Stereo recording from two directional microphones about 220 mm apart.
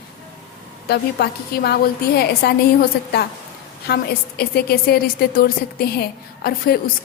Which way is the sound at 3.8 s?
45° left (ahead or behind).